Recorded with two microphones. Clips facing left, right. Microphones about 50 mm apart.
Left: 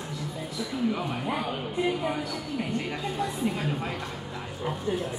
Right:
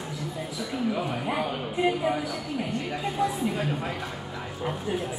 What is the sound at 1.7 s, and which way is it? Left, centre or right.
Speech, right.